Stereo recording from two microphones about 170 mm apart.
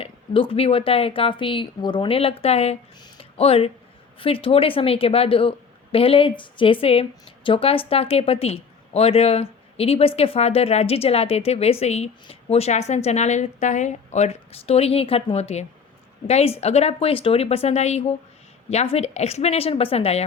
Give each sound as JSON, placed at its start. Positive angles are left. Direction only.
{"t": 0.0, "sound": "a woman's voice", "side_deg": 35}
{"t": 3.0, "sound": "a sound", "side_deg": 35}
{"t": 4.2, "sound": "a woman's voice", "side_deg": 30}